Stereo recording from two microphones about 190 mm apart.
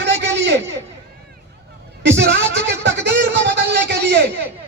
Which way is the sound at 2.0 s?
70° right (ahead or behind).